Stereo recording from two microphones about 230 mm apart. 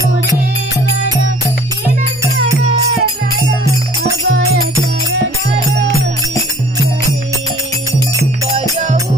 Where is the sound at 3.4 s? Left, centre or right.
Centre.